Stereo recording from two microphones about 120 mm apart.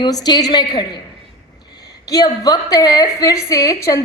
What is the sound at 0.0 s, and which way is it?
Speech, 35° left (ahead or behind).